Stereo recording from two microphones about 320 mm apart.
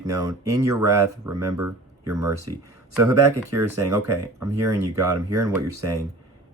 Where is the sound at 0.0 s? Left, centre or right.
Centre.